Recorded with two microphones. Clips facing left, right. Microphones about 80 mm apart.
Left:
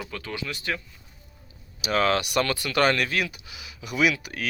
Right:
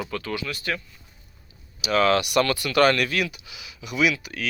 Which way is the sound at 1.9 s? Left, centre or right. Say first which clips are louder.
Right 3 dB; left.